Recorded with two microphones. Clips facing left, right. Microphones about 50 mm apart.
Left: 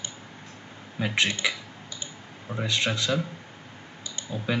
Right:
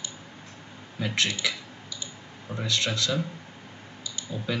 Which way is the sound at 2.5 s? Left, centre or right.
Centre.